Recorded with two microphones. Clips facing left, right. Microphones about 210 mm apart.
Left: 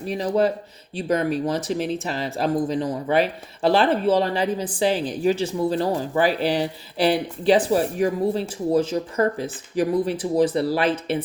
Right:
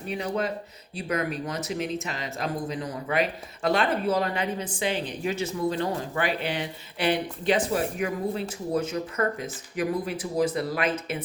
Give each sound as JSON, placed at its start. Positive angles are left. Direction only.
{"t": 0.2, "sound": "speech", "side_deg": 35}